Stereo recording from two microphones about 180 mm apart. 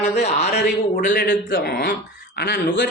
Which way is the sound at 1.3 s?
65° left (ahead or behind).